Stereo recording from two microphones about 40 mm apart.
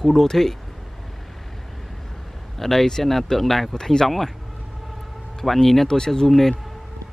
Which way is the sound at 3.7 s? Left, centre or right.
Centre.